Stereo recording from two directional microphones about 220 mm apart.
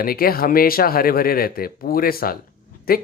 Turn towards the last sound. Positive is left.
turn(degrees=45)  # may be behind; listen again after turning